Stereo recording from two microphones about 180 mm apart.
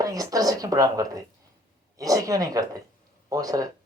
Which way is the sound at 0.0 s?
20° right (ahead or behind).